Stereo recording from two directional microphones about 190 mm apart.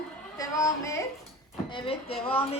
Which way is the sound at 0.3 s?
15° left (ahead or behind).